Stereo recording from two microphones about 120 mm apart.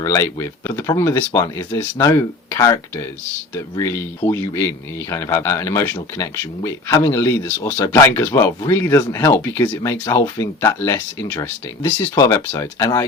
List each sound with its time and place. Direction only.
0.0 s speech: 25° left (ahead or behind)